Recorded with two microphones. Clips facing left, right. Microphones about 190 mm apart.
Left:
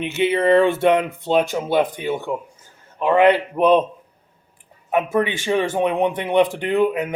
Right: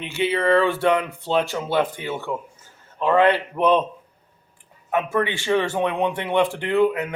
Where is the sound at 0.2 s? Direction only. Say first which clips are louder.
Left 3 dB; 20° left (ahead or behind).